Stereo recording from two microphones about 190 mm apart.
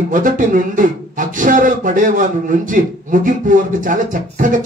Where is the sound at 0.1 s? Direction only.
45° right (ahead or behind).